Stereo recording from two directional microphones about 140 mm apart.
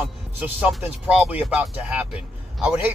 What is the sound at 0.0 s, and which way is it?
Speech, 5° right (ahead or behind).